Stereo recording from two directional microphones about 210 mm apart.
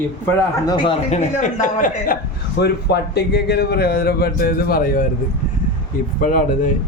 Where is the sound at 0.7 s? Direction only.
20° left (ahead or behind).